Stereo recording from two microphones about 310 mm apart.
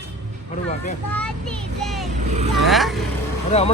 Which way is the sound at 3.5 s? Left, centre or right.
Left.